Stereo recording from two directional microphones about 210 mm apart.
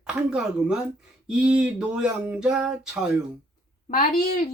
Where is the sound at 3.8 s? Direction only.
40° left (ahead or behind).